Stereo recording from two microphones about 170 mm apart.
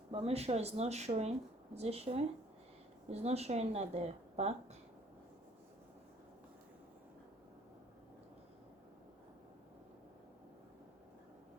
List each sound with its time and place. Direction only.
0.1 s speech: 35° right (ahead or behind)